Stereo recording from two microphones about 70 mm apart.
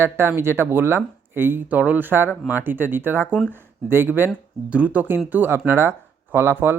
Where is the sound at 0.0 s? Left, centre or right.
Right.